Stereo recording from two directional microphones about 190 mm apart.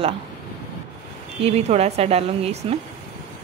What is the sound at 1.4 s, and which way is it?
Speech, 35° right (ahead or behind).